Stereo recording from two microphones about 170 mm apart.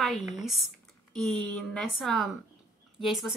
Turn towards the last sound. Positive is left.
turn(degrees=0)  # may be behind; listen again after turning